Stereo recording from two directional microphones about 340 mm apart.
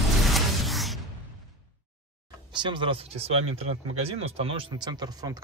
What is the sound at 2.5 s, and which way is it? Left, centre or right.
Speech, centre.